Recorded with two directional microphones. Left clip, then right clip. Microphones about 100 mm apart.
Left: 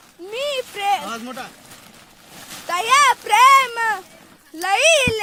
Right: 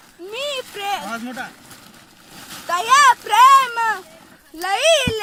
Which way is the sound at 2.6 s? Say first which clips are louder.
Right 2 dB; 50° left (ahead or behind).